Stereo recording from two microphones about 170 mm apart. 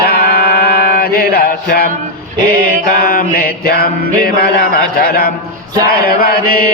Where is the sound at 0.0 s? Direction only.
70° left (ahead or behind).